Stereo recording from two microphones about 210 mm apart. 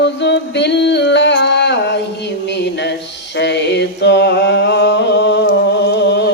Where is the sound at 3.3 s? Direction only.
55° left (ahead or behind).